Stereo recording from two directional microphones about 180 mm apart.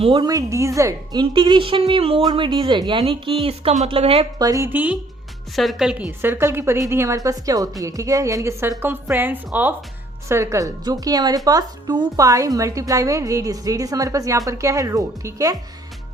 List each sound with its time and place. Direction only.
0.0 s a woman's voice: 25° right (ahead or behind)
4.4 s a woman's voice: 20° right (ahead or behind)